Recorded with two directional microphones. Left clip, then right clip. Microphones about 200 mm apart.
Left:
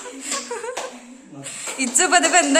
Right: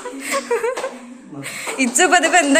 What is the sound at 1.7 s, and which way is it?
Speech, 5° left (ahead or behind).